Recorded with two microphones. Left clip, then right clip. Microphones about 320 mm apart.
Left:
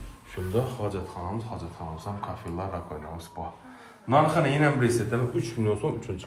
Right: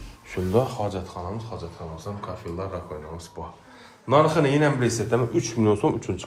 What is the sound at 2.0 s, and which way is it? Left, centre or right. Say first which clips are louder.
A man's voice: right 2 dB; centre.